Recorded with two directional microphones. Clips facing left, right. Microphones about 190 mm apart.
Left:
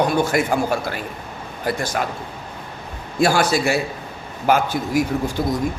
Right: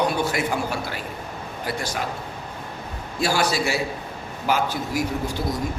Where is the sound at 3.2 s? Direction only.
50° left (ahead or behind).